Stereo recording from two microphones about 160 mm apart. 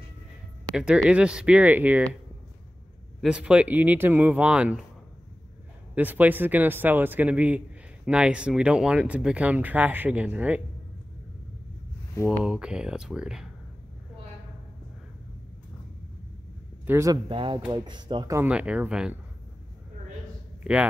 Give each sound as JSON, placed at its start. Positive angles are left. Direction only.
{"t": 0.7, "sound": "a man's voice", "side_deg": -5}
{"t": 3.2, "sound": "a man's voice", "side_deg": -5}
{"t": 5.9, "sound": "a man's voice", "side_deg": -10}
{"t": 12.3, "sound": "speech", "side_deg": -5}
{"t": 16.8, "sound": "speech", "side_deg": -15}
{"t": 17.3, "sound": "speech", "side_deg": -30}
{"t": 18.3, "sound": "a man's voice", "side_deg": -10}
{"t": 20.7, "sound": "speech", "side_deg": -5}